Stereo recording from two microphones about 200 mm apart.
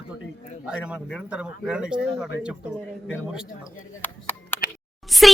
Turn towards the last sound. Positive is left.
turn(degrees=0)  # may be behind; listen again after turning